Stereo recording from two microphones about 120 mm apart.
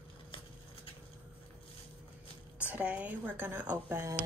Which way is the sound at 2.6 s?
15° right (ahead or behind).